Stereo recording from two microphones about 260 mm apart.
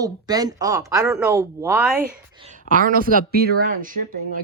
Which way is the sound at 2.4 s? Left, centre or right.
Right.